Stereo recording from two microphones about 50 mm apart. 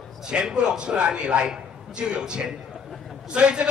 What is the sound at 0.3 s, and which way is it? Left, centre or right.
A man's voice, centre.